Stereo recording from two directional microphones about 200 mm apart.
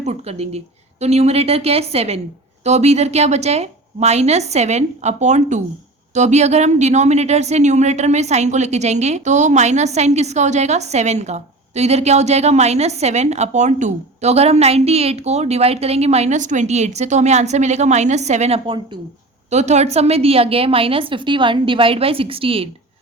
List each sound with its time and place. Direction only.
0.0 s a woman's voice: 35° right (ahead or behind)